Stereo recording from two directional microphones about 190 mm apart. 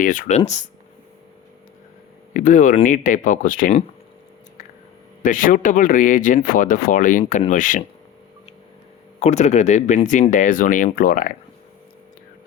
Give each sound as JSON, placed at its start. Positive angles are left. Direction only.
{"t": 0.0, "sound": "speech", "side_deg": 45}
{"t": 2.3, "sound": "speech", "side_deg": 40}
{"t": 5.2, "sound": "speech", "side_deg": 45}
{"t": 9.2, "sound": "speech", "side_deg": 35}